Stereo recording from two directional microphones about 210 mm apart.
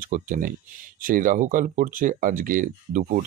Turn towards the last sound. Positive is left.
turn(degrees=-40)  # may be behind; listen again after turning